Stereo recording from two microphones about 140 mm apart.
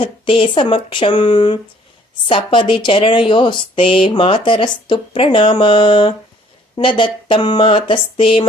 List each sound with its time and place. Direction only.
0.0 s speech: 40° left (ahead or behind)